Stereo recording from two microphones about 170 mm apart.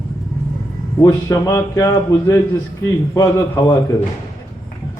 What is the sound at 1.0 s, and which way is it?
A man's voice, 20° left (ahead or behind).